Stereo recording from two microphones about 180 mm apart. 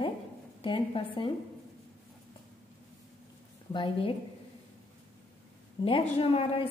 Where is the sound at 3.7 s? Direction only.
30° left (ahead or behind).